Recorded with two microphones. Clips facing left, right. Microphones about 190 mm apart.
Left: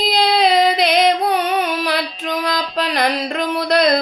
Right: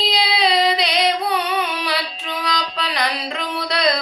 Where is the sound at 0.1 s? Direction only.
50° left (ahead or behind).